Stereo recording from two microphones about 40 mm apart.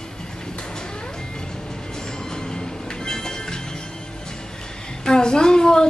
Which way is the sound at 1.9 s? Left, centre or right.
Centre.